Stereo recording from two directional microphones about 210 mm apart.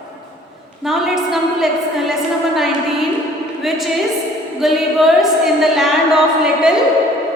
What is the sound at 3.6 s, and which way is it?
A woman's voice, centre (ahead or behind).